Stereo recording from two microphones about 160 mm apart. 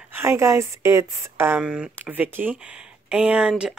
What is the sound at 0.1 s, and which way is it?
Speech, 15° right (ahead or behind).